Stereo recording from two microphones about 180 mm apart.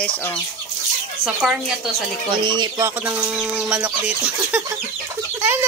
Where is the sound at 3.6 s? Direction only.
5° right (ahead or behind).